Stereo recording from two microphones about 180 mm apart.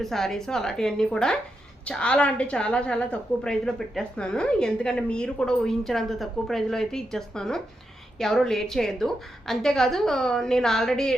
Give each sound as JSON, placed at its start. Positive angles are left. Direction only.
{"t": 0.0, "sound": "a woman's voice", "side_deg": 0}